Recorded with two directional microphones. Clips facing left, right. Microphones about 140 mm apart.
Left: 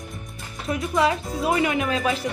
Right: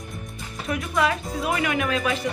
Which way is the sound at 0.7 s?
25° left (ahead or behind).